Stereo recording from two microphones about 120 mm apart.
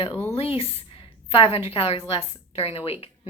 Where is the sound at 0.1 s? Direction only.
20° left (ahead or behind).